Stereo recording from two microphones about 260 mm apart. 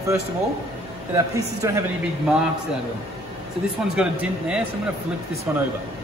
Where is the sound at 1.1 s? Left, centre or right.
Centre.